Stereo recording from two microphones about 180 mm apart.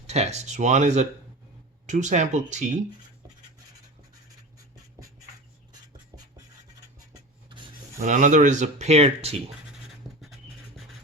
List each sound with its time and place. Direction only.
0.1 s speech: 35° right (ahead or behind)
7.9 s speech: 45° right (ahead or behind)
9.8 s scratch: centre (ahead or behind)